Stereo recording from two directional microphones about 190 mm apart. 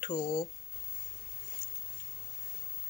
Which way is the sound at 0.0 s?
20° left (ahead or behind).